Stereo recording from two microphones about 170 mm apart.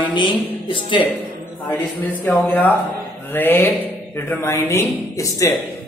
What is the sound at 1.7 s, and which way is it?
Speech, 10° left (ahead or behind).